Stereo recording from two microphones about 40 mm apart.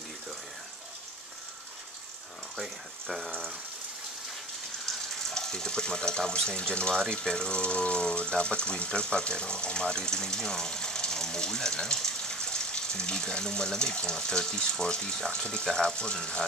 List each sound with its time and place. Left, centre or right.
2.5 s water: centre
5.3 s speech: centre